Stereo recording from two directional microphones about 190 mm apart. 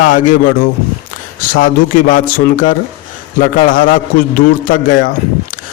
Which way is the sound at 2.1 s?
45° left (ahead or behind).